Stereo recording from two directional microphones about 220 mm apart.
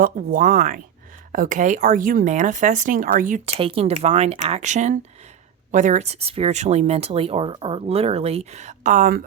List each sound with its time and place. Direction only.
0.0 s speech: 40° right (ahead or behind)